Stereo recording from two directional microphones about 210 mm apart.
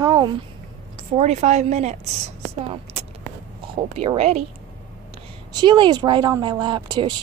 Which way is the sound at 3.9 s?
30° right (ahead or behind).